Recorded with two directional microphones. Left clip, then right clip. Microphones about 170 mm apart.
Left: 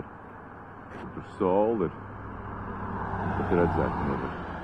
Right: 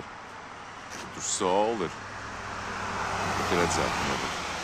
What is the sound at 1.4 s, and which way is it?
Vehicle, 15° right (ahead or behind).